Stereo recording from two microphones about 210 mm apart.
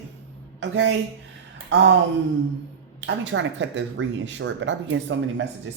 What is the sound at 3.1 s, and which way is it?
Speech, 60° right (ahead or behind).